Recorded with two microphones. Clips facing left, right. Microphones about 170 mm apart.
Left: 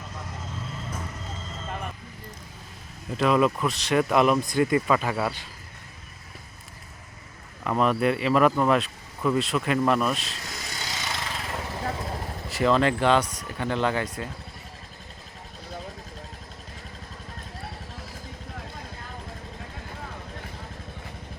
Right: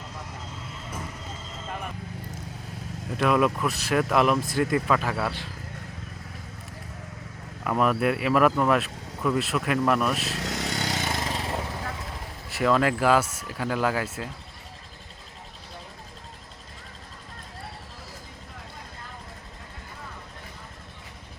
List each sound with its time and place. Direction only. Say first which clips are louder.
3.2 s speech: left 1 dB; centre (ahead or behind)
7.6 s speech: left 1 dB; 5° right (ahead or behind)
10.3 s vehicle: right 8 dB; 70° right (ahead or behind); by 11.5 s 35° right (ahead or behind)
12.5 s speech: left 1 dB; centre (ahead or behind)